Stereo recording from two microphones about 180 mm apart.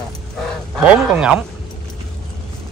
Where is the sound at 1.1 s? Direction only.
5° right (ahead or behind).